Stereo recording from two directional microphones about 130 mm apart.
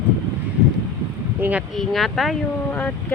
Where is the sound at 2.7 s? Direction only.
10° left (ahead or behind).